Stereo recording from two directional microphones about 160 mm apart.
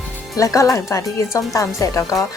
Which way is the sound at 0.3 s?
20° left (ahead or behind).